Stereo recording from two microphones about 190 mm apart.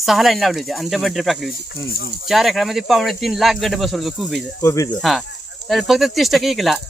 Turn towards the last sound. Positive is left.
turn(degrees=0)  # may be behind; listen again after turning